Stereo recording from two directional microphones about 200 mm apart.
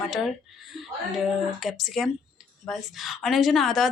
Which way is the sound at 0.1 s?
Centre (ahead or behind).